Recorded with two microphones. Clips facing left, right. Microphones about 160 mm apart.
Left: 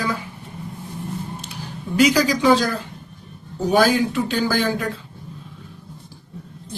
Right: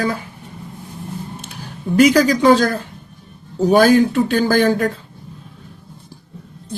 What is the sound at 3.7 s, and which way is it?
A man's voice, 50° right (ahead or behind).